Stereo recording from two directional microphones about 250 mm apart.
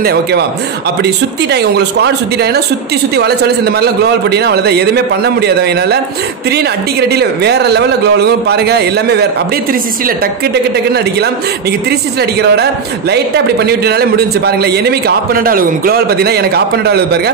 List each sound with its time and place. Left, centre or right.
0.0 s a man's voice: right
1.5 s a man's voice: right
13.7 s a man's voice: right